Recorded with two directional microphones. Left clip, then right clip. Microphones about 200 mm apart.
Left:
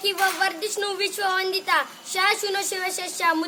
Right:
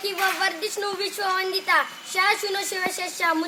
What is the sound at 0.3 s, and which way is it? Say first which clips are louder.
A woman's voice: left 1 dB; 25° left (ahead or behind).